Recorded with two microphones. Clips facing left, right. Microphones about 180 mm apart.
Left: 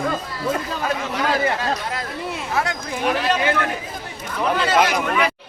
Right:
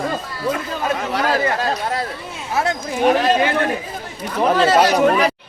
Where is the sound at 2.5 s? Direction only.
25° right (ahead or behind).